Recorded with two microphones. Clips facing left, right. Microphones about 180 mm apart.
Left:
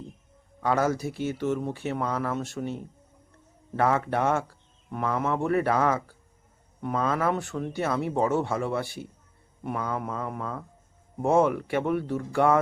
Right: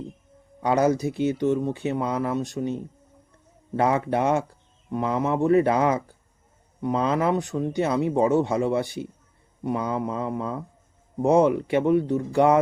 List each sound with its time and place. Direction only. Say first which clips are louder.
0.6 s speech: right 4 dB; 20° right (ahead or behind)